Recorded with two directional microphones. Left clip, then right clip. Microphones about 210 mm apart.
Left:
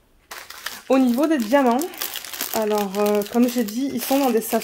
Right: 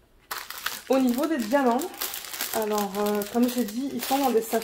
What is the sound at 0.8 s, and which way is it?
Speech, 60° left (ahead or behind).